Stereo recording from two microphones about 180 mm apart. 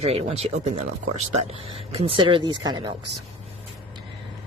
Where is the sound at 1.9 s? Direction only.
30° right (ahead or behind).